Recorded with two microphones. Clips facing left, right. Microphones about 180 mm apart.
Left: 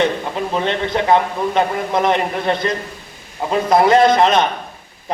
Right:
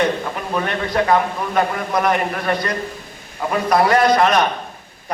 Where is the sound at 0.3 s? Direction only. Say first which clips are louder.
Left 3 dB; 25° left (ahead or behind).